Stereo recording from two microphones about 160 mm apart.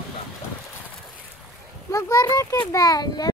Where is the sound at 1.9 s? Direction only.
20° left (ahead or behind).